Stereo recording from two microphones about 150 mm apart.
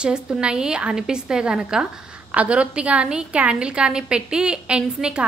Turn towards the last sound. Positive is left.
turn(degrees=-5)  # may be behind; listen again after turning